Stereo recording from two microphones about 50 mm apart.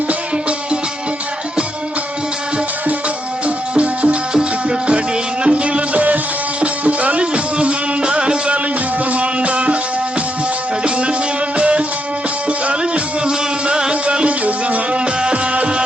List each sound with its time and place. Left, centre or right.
3.4 s music: right
10.8 s music: right